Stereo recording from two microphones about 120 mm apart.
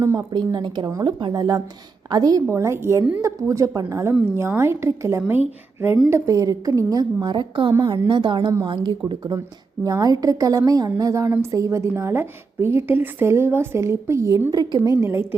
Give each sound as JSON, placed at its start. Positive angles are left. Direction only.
{"t": 0.0, "sound": "a woman's voice", "side_deg": -25}
{"t": 14.8, "sound": "a woman's voice", "side_deg": -20}